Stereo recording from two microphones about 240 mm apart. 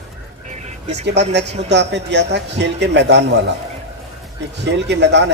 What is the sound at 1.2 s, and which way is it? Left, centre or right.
Speech, right.